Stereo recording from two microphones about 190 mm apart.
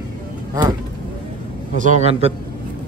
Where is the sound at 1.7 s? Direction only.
40° right (ahead or behind).